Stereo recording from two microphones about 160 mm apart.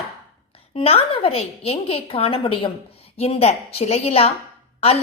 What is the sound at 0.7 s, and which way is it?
A woman's voice, 40° left (ahead or behind).